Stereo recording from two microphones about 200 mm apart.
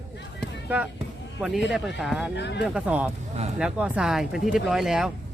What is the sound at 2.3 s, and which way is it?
Speech, 60° left (ahead or behind).